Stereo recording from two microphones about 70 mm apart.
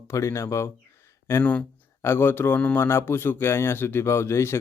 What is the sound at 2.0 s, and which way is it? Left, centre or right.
Speech, left.